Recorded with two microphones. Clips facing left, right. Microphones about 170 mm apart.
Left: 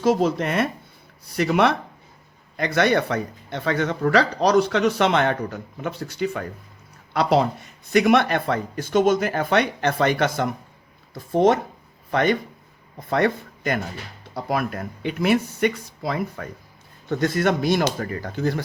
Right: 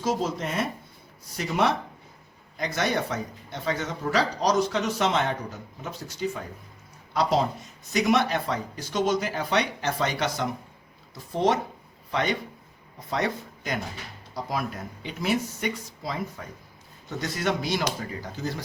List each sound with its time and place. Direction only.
0.0 s a man's voice: 65° left (ahead or behind)